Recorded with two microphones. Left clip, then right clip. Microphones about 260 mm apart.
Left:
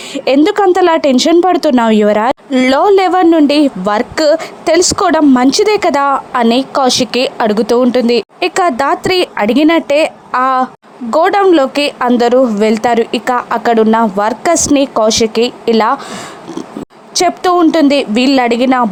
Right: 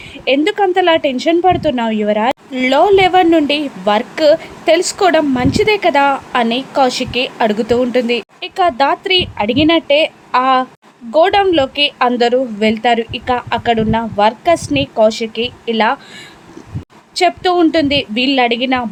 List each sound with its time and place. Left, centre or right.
0.1 s a woman's voice: left